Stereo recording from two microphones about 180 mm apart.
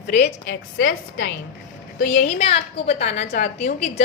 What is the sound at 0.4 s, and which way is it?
Speech, 90° left.